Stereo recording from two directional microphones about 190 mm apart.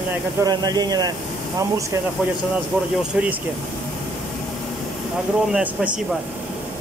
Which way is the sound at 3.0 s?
5° right (ahead or behind).